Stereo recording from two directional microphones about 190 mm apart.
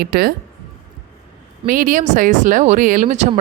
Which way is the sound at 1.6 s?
45° right (ahead or behind).